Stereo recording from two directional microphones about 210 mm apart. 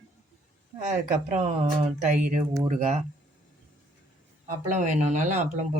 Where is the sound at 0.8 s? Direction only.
35° right (ahead or behind).